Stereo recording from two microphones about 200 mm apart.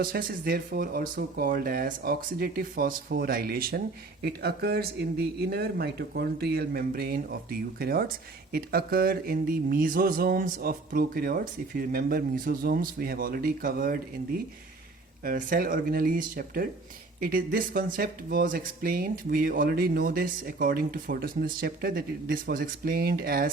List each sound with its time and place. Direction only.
0.0 s speech: 45° right (ahead or behind)
15.2 s speech: 45° right (ahead or behind)